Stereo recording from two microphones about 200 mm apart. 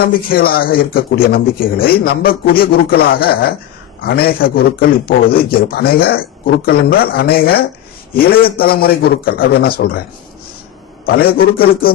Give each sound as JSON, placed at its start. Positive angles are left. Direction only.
{"t": 0.3, "sound": "a man's voice", "side_deg": 50}
{"t": 11.0, "sound": "a man's voice", "side_deg": 50}